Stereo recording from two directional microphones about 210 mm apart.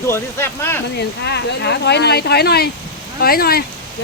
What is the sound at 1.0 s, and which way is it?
Speech, 55° left (ahead or behind).